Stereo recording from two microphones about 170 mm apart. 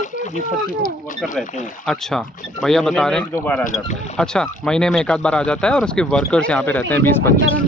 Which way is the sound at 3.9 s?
45° left (ahead or behind).